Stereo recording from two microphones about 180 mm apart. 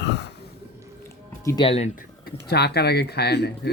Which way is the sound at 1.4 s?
20° left (ahead or behind).